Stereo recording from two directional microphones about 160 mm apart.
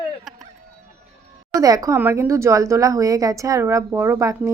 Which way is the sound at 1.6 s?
20° right (ahead or behind).